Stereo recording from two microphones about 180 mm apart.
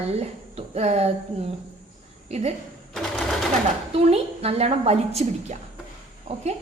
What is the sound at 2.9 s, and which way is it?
Sewing machine, centre (ahead or behind).